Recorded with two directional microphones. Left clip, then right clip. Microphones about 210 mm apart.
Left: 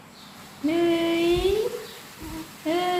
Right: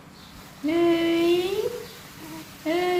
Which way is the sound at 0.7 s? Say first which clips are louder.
Right 1 dB; 15° left (ahead or behind).